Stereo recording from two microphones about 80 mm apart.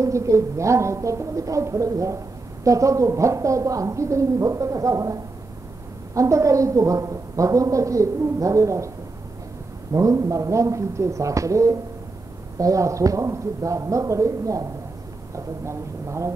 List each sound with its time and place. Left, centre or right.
0.0 s a woman's voice: right
9.9 s a woman's voice: right